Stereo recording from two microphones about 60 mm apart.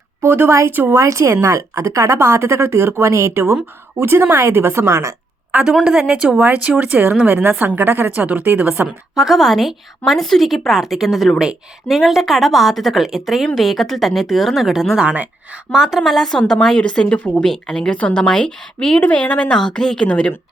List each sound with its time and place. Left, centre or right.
0.3 s a woman's voice: right
0.9 s speech: right
5.8 s a woman's voice: centre
6.4 s a woman's voice: right
9.1 s a woman's voice: centre
16.0 s a woman's voice: centre
16.7 s a woman's voice: centre